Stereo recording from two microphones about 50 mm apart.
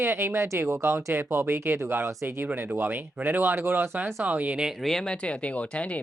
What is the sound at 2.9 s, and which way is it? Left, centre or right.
Speech, right.